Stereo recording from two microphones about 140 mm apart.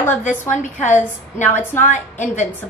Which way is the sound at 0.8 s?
60° left (ahead or behind).